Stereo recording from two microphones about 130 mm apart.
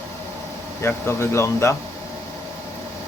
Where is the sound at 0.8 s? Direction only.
20° left (ahead or behind).